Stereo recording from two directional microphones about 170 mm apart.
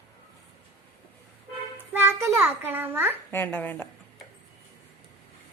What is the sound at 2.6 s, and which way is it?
Speech, 10° right (ahead or behind).